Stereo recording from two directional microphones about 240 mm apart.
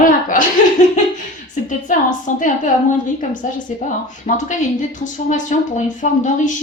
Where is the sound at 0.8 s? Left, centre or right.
Left.